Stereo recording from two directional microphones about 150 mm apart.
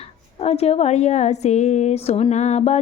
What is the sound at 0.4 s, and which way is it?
A woman's voice, 45° left (ahead or behind).